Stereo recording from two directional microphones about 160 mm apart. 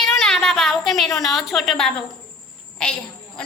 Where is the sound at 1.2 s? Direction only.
Centre (ahead or behind).